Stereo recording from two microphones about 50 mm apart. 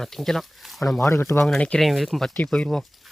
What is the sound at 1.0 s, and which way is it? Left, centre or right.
Speech, left.